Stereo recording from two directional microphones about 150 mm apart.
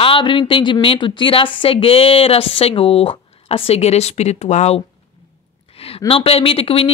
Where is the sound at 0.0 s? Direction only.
35° left (ahead or behind).